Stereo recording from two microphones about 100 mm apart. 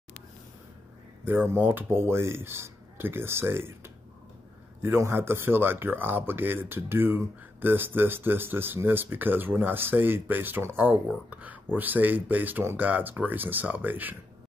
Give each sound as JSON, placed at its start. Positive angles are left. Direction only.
{"t": 1.2, "sound": "speech", "side_deg": -20}